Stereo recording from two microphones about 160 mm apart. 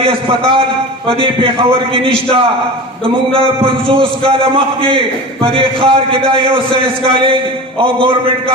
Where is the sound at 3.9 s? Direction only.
35° right (ahead or behind).